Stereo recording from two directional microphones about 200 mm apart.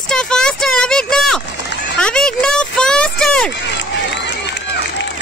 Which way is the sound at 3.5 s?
60° left (ahead or behind).